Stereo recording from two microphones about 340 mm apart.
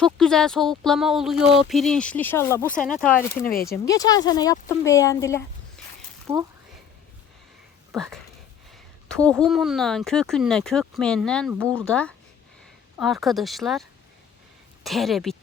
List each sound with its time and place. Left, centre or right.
0.0 s speech: centre
3.5 s speech: left
3.8 s speech: centre
6.3 s speech: centre
7.9 s speech: centre
14.8 s speech: centre